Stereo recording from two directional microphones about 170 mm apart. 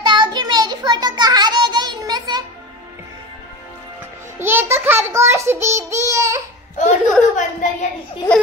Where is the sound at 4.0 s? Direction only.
15° right (ahead or behind).